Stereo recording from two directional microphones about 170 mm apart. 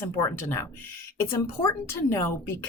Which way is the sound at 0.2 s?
15° left (ahead or behind).